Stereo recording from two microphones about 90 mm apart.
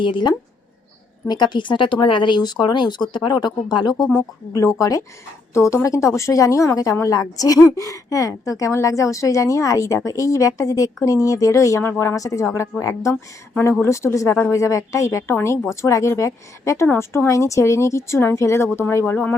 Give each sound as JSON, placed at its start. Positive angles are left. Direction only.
{"t": 0.0, "sound": "speech", "side_deg": 60}
{"t": 4.1, "sound": "a woman's voice", "side_deg": 35}